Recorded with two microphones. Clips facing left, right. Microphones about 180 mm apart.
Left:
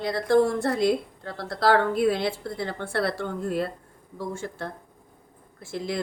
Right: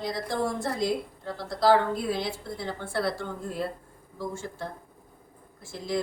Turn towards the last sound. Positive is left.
turn(degrees=65)  # may be behind; listen again after turning